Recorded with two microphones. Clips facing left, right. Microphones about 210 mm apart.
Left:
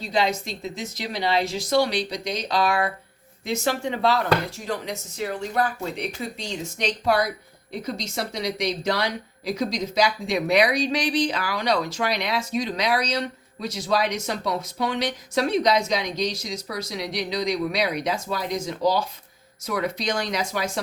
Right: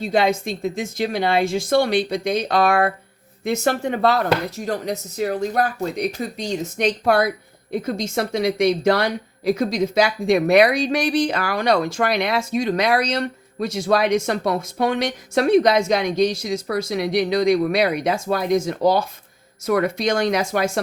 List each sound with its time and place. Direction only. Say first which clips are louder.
0.0 s speech: right 5 dB; 55° right (ahead or behind)